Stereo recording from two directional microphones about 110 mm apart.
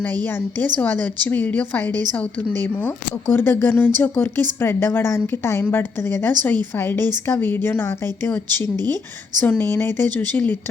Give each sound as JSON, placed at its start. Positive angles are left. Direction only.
{"t": 0.3, "sound": "a woman's voice", "side_deg": 20}
{"t": 8.7, "sound": "speech", "side_deg": -35}
{"t": 9.4, "sound": "a woman's voice", "side_deg": 15}